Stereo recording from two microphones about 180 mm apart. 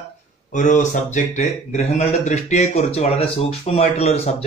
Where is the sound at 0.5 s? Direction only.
45° left (ahead or behind).